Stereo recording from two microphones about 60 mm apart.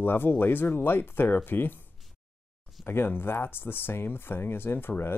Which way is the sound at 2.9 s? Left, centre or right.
Left.